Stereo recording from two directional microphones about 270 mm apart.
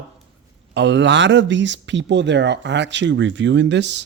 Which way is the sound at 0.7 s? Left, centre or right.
Right.